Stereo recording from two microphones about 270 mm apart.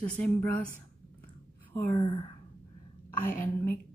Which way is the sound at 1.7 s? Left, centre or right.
Centre.